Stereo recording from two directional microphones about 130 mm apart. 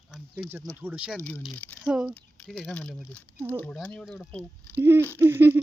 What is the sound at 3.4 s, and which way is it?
Speech, 20° right (ahead or behind).